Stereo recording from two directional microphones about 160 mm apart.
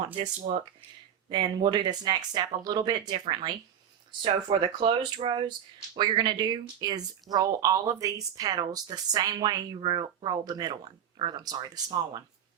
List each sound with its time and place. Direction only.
0.5 s speech: 35° right (ahead or behind)